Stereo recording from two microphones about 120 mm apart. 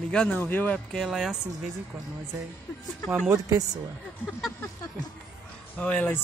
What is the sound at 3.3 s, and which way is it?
Speech, 30° right (ahead or behind).